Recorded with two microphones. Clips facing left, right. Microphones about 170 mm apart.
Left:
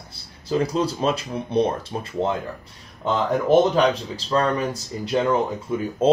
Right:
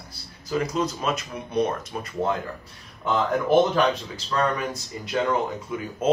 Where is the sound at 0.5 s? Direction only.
30° left (ahead or behind).